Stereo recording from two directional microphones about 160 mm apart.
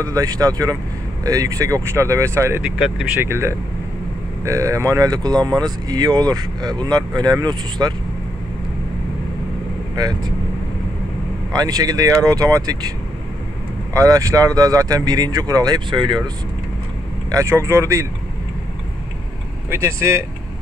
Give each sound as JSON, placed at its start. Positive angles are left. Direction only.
{"t": 0.0, "sound": "speech", "side_deg": -20}
{"t": 9.9, "sound": "speech", "side_deg": -25}
{"t": 11.5, "sound": "speech", "side_deg": -25}
{"t": 13.9, "sound": "speech", "side_deg": -20}
{"t": 17.3, "sound": "speech", "side_deg": -20}
{"t": 19.7, "sound": "speech", "side_deg": -15}